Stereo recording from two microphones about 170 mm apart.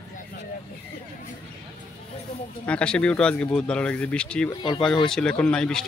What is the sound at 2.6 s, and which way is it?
Speech, 5° left (ahead or behind).